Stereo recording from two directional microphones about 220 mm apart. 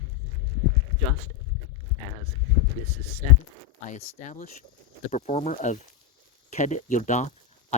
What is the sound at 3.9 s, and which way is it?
Speech, 35° left (ahead or behind).